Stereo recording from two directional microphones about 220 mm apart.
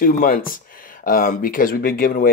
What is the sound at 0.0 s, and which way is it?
Speech, 40° left (ahead or behind).